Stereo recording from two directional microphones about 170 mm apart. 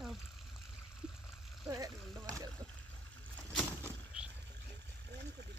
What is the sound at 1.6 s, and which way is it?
Frying, 20° right (ahead or behind).